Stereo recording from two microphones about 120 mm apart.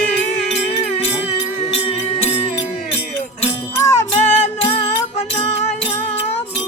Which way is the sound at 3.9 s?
65° left (ahead or behind).